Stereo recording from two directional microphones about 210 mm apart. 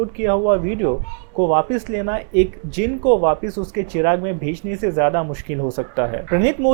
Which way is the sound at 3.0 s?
30° right (ahead or behind).